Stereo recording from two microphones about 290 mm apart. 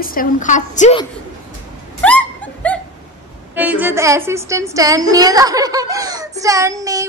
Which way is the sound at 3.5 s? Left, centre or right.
Centre.